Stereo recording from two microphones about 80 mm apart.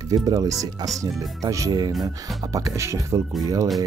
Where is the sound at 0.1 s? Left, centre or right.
Right.